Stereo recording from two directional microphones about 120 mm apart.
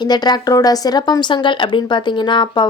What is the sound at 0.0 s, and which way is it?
A woman's voice, 35° left (ahead or behind).